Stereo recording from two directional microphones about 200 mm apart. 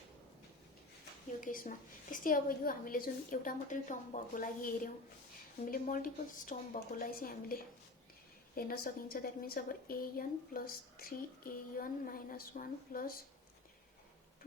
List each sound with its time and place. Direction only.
1.4 s a woman's voice: 40° left (ahead or behind)